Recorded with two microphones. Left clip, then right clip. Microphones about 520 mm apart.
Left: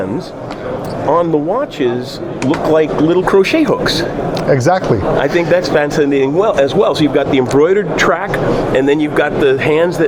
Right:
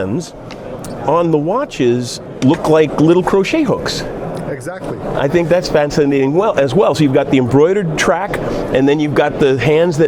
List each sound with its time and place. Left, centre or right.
1.1 s speech: right
4.5 s speech: left
5.1 s a man's voice: right